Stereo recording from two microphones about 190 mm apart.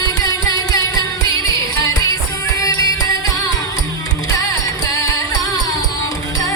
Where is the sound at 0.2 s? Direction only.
20° left (ahead or behind).